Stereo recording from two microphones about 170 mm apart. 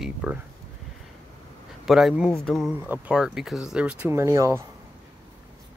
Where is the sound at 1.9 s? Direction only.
Centre (ahead or behind).